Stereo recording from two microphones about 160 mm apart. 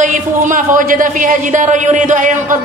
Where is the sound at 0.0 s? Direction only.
55° right (ahead or behind).